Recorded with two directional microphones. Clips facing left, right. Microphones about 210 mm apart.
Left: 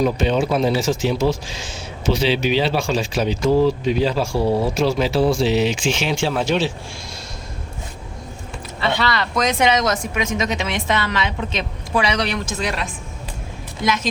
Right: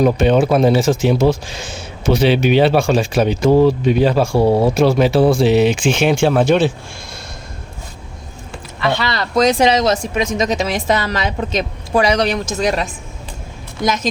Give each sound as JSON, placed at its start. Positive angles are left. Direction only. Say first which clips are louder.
{"t": 0.0, "sound": "speech", "louder": "right 5 dB", "side_deg": -55}
{"t": 9.0, "sound": "speech", "louder": "right 5 dB", "side_deg": -35}